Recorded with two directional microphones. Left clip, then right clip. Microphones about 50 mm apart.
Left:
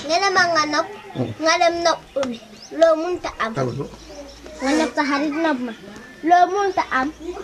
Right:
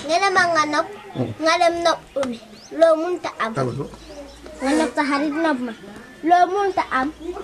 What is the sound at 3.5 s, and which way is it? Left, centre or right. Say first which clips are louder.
Speech: even; centre.